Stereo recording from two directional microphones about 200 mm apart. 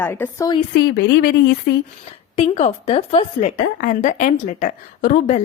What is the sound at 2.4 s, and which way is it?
A woman's voice, 30° left (ahead or behind).